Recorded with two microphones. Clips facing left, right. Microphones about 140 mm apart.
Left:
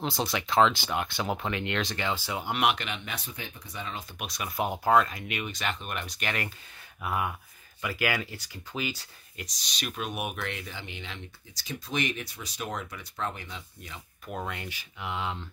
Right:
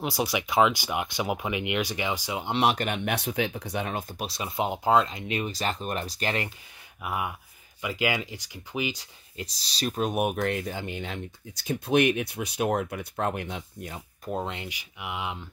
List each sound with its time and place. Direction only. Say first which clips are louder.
0.0 s speech: right 2 dB; 10° right (ahead or behind); by 2.8 s 30° right (ahead or behind)
2.8 s speech: right 9 dB; 55° right (ahead or behind)
4.2 s speech: even; 30° right (ahead or behind)
5.4 s speech: right 3 dB; 35° right (ahead or behind)
7.0 s speech: even; 10° right (ahead or behind)
9.4 s speech: right 6 dB; 30° right (ahead or behind)
14.3 s speech: right 4 dB; 25° right (ahead or behind)